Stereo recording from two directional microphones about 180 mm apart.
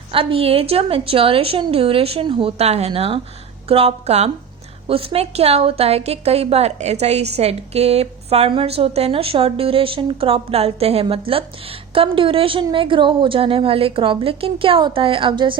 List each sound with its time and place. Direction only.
0.1 s a woman's voice: 30° right (ahead or behind)